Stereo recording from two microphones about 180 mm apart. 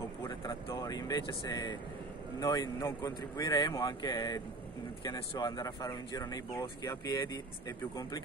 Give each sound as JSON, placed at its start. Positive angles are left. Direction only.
{"t": 0.2, "sound": "speech", "side_deg": 20}